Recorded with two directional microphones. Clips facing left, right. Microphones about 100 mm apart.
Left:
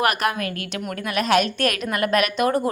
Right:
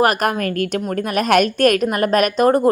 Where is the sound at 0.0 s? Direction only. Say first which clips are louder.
Right 5 dB; 40° right (ahead or behind).